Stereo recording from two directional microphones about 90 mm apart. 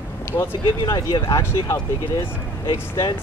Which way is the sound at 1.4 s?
35° left (ahead or behind).